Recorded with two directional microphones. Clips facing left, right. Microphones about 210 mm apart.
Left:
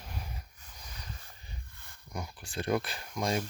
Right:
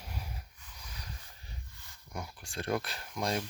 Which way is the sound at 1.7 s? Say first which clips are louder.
Left 1 dB; 55° left (ahead or behind).